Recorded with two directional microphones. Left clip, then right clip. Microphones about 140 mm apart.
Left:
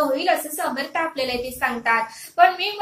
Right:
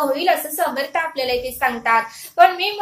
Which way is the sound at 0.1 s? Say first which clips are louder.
Right 2 dB; 30° right (ahead or behind).